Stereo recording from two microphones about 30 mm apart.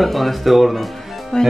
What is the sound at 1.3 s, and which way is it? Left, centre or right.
Speech, left.